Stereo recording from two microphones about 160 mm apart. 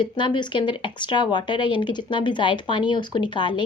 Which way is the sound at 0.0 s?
30° left (ahead or behind).